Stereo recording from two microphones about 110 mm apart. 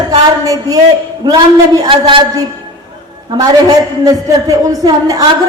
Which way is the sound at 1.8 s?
50° right (ahead or behind).